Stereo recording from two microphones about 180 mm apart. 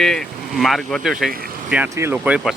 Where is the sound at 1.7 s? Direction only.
10° right (ahead or behind).